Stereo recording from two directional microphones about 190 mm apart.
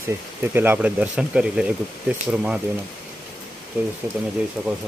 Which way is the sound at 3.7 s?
10° right (ahead or behind).